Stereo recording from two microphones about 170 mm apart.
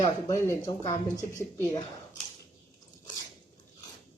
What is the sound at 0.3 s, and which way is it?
Speech, 20° left (ahead or behind).